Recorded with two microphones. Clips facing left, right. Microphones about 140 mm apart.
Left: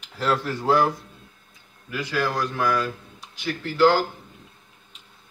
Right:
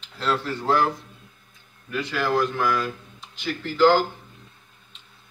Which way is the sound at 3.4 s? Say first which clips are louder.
Even; 10° left (ahead or behind).